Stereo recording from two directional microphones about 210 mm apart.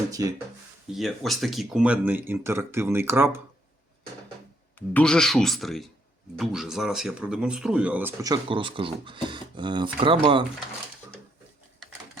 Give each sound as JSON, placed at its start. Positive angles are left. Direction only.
{"t": 0.2, "sound": "speech", "side_deg": -15}
{"t": 0.9, "sound": "speech", "side_deg": 0}
{"t": 4.9, "sound": "speech", "side_deg": 5}